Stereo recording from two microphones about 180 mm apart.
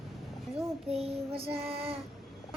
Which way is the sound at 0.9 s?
35° right (ahead or behind).